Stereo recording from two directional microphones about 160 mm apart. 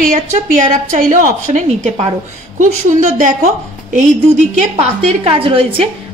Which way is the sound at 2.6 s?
55° right (ahead or behind).